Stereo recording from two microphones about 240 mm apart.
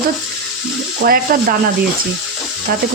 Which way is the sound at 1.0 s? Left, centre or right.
Right.